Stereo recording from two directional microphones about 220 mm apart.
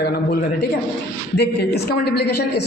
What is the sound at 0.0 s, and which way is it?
A man's voice, 45° left (ahead or behind).